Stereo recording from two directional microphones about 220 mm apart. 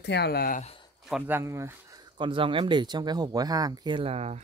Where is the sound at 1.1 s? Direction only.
10° right (ahead or behind).